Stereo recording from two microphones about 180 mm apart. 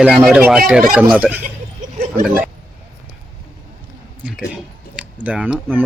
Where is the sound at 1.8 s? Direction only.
45° right (ahead or behind).